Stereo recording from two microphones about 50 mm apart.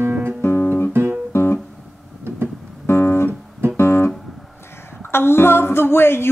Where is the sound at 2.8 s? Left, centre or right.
Left.